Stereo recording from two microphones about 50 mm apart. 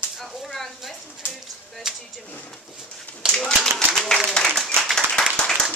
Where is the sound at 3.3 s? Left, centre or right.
Centre.